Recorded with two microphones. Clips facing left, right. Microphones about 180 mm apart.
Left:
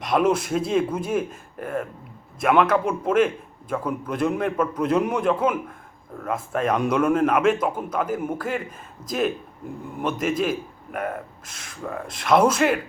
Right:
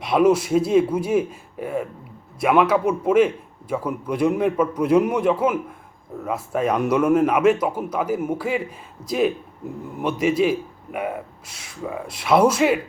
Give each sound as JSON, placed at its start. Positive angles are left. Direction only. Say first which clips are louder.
{"t": 0.0, "sound": "a man's voice", "louder": "right 4 dB", "side_deg": -10}
{"t": 9.0, "sound": "speech", "louder": "right 5 dB", "side_deg": 50}
{"t": 10.2, "sound": "a man's voice", "louder": "right 6 dB", "side_deg": -10}